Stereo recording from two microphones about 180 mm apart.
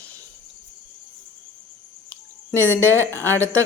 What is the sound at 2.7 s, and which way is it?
Speech, 10° left (ahead or behind).